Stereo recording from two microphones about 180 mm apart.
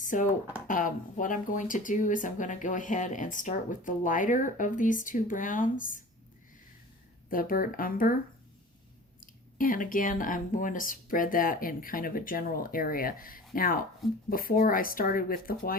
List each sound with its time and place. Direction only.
0.0 s speech: 45° left (ahead or behind)
7.3 s speech: 50° left (ahead or behind)
9.2 s speech: 50° left (ahead or behind)